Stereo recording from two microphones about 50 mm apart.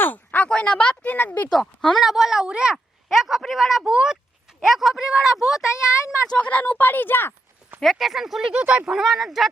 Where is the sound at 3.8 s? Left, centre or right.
Centre.